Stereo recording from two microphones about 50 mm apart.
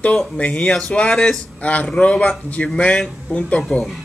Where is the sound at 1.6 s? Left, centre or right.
Left.